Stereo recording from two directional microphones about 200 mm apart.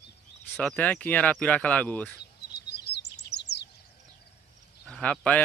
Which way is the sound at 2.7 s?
55° left (ahead or behind).